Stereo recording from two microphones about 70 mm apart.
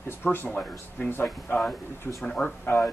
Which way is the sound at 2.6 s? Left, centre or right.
Left.